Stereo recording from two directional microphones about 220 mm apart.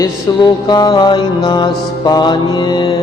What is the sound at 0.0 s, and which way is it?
Mantra, 15° left (ahead or behind).